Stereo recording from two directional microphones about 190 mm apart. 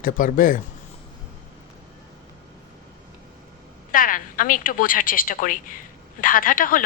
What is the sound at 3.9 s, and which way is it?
Speech, 45° left (ahead or behind).